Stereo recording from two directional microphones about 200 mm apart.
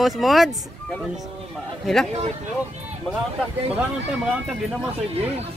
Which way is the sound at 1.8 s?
Centre (ahead or behind).